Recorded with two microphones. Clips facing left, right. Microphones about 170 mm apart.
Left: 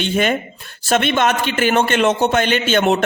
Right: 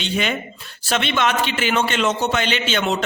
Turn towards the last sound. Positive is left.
turn(degrees=50)  # may be behind; listen again after turning